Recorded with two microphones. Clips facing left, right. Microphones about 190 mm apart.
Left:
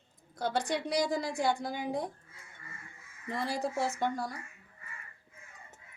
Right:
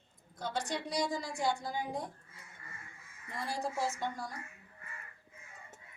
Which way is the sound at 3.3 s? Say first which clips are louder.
Left 4 dB; 70° left (ahead or behind).